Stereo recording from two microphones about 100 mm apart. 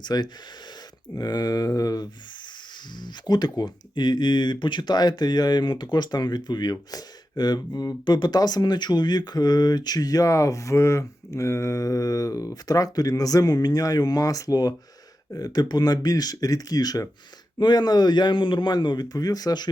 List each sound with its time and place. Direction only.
0.0 s a man's voice: 45° left (ahead or behind)